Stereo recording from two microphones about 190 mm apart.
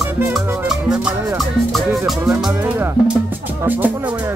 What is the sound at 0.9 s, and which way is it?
Music, 5° right (ahead or behind).